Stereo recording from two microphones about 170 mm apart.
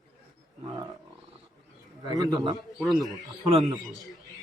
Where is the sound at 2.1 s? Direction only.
20° right (ahead or behind).